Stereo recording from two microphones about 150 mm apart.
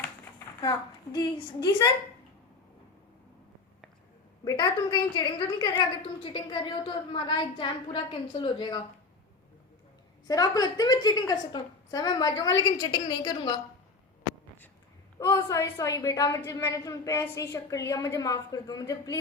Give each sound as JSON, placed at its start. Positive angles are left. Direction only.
{"t": 0.0, "sound": "a woman's voice", "side_deg": 20}
{"t": 4.4, "sound": "a woman's voice", "side_deg": 30}
{"t": 10.2, "sound": "a woman's voice", "side_deg": 25}
{"t": 15.2, "sound": "a woman's voice", "side_deg": 20}